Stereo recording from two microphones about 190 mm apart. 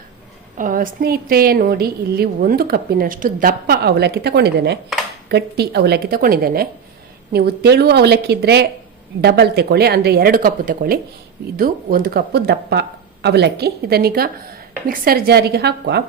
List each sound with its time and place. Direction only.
0.5 s a woman's voice: 45° right (ahead or behind)